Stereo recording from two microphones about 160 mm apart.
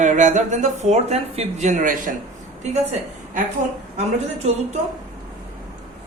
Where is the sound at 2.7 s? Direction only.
45° right (ahead or behind).